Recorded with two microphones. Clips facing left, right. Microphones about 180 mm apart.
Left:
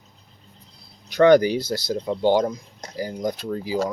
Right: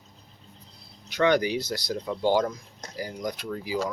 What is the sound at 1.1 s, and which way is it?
Speech, 40° left (ahead or behind).